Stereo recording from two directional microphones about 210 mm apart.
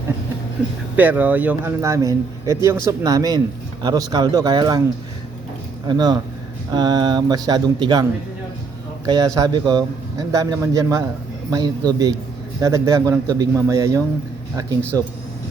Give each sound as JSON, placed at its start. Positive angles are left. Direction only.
{"t": 0.9, "sound": "a man's voice", "side_deg": -10}
{"t": 5.9, "sound": "speech", "side_deg": -20}
{"t": 9.0, "sound": "a man's voice", "side_deg": -15}